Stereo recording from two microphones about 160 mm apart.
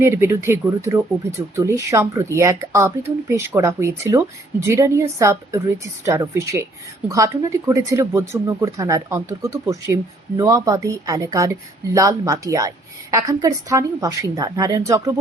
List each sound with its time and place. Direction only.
0.0 s speech: 15° right (ahead or behind)